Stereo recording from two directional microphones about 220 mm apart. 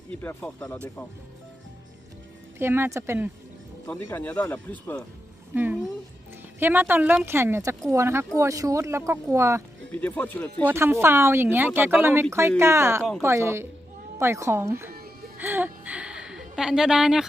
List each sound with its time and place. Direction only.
0.1 s speech: 5° left (ahead or behind)
2.6 s speech: 10° right (ahead or behind)
3.8 s speech: 5° left (ahead or behind)
5.5 s speech: 5° right (ahead or behind)
9.9 s speech: 5° left (ahead or behind)
10.7 s speech: 10° right (ahead or behind)
14.9 s music: 45° right (ahead or behind)
15.4 s a sound: 10° right (ahead or behind)